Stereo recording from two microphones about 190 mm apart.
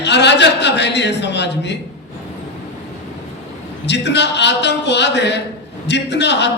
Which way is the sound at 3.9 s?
65° left (ahead or behind).